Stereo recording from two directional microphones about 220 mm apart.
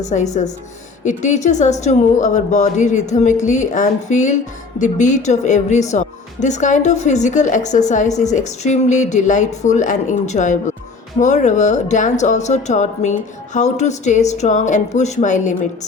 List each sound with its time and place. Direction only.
0.0 s speech: 30° left (ahead or behind)